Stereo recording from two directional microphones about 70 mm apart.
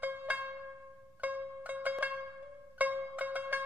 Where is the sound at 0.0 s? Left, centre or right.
Right.